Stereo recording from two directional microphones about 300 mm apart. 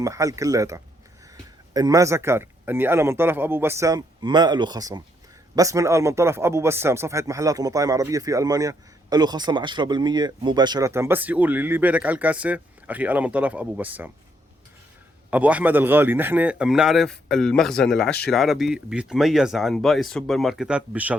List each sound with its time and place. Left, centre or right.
0.0 s speech: centre
15.3 s speech: centre